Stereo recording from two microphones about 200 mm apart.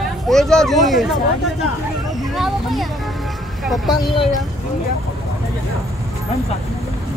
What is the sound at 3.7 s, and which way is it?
Speech, centre (ahead or behind).